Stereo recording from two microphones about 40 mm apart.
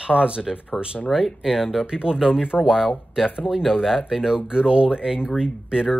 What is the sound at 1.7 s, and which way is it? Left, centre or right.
Speech, right.